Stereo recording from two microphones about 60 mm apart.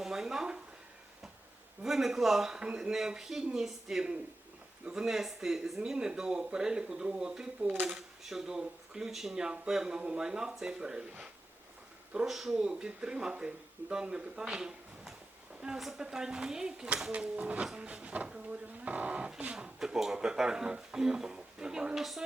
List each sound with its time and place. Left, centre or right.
0.0 s a sound: centre
1.8 s speech: centre
12.2 s speech: centre